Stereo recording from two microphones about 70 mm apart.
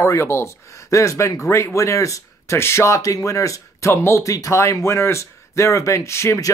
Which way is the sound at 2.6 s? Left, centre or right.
Left.